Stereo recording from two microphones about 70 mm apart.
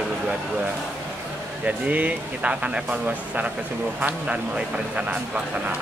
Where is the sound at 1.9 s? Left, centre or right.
Right.